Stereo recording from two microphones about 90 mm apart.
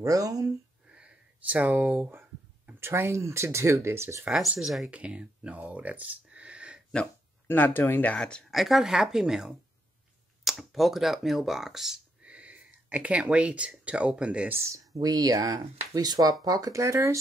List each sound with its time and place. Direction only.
0.0 s speech: 40° right (ahead or behind)
0.8 s speech: 10° right (ahead or behind); by 4.3 s 30° right (ahead or behind)
4.3 s speech: 5° right (ahead or behind)
4.9 s speech: 15° right (ahead or behind)
7.4 s speech: 20° left (ahead or behind)
8.5 s speech: centre (ahead or behind)
14.6 s speech: 35° right (ahead or behind)